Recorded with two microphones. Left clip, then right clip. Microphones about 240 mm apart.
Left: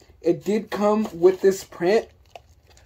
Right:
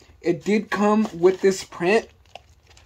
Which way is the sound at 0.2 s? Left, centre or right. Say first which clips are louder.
Even; right.